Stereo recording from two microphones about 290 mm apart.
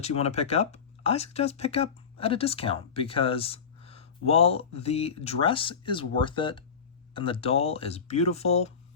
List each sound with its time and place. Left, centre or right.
0.0 s speech: left